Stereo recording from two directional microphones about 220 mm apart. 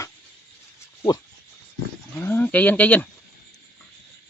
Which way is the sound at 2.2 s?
10° left (ahead or behind).